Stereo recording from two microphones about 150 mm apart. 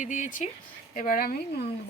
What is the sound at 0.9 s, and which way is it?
Speech, 65° left (ahead or behind).